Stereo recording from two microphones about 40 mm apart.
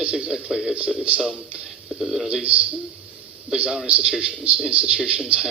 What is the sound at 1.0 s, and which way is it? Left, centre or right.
Speech, right.